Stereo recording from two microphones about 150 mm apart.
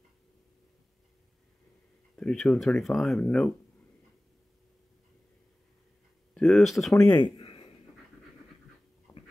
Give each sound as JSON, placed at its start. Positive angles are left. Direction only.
{"t": 2.1, "sound": "speech", "side_deg": 5}
{"t": 6.3, "sound": "speech", "side_deg": 0}
{"t": 7.1, "sound": "speech", "side_deg": 30}
{"t": 9.1, "sound": "dog", "side_deg": 20}